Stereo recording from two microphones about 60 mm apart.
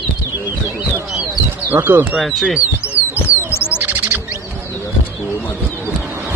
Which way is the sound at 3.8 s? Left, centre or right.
Right.